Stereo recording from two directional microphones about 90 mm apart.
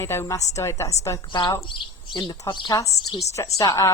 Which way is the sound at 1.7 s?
60° left (ahead or behind).